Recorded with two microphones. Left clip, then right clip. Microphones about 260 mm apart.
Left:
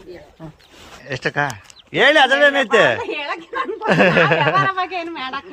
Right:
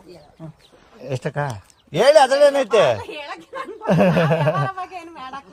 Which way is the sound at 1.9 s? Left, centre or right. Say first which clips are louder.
Even; right.